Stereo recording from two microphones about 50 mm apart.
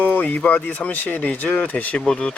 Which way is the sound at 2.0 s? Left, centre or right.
Centre.